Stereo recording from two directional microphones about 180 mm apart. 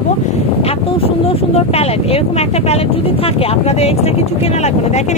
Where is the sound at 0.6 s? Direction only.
30° left (ahead or behind).